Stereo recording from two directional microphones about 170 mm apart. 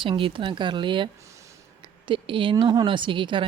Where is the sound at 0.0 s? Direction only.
30° right (ahead or behind).